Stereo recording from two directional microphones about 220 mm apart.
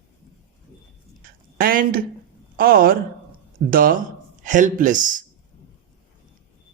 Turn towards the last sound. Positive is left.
turn(degrees=-35)  # may be behind; listen again after turning